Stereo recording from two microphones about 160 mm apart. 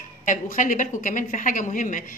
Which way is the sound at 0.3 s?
55° left (ahead or behind).